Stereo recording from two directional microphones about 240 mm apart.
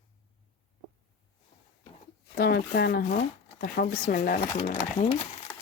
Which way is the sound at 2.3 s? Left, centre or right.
Left.